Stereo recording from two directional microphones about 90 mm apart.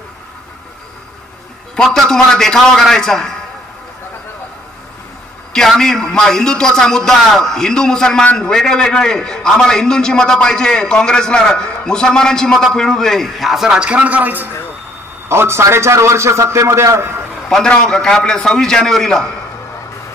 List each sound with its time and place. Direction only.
1.8 s a man's voice: 5° left (ahead or behind)
5.5 s a man's voice: 5° left (ahead or behind); by 17.2 s 30° right (ahead or behind)
17.5 s a man's voice: 5° left (ahead or behind)